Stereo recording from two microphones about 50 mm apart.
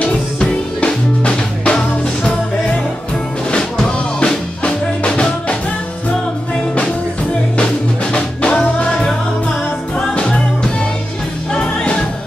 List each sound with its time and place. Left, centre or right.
0.0 s music: centre
3.5 s music: centre
8.1 s music: left
11.5 s music: centre